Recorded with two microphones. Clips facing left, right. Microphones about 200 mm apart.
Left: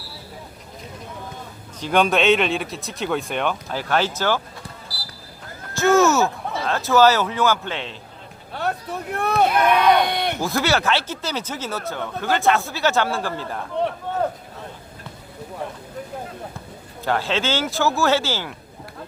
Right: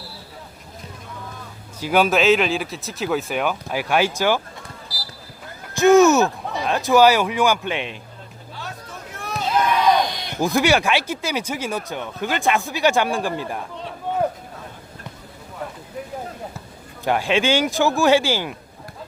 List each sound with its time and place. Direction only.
1.8 s speech: 5° right (ahead or behind)
5.7 s speech: 15° right (ahead or behind)
8.5 s a sound: 60° left (ahead or behind)
10.4 s speech: 15° right (ahead or behind)
17.0 s speech: 15° right (ahead or behind)